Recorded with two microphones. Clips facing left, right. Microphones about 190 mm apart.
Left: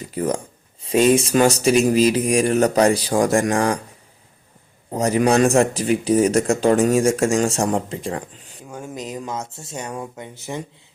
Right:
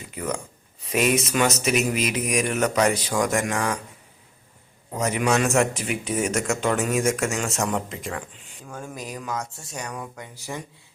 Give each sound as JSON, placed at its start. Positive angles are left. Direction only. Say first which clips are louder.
{"t": 0.1, "sound": "speech", "louder": "left 7 dB", "side_deg": 35}
{"t": 4.9, "sound": "speech", "louder": "left 6 dB", "side_deg": 35}
{"t": 8.6, "sound": "speech", "louder": "left 4 dB", "side_deg": 15}